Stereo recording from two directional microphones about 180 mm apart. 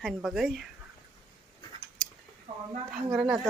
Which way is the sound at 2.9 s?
5° right (ahead or behind).